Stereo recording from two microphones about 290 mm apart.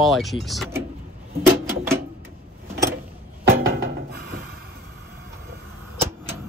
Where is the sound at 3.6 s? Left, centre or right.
Right.